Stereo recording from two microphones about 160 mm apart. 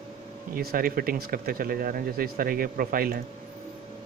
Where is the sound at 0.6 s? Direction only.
65° right (ahead or behind).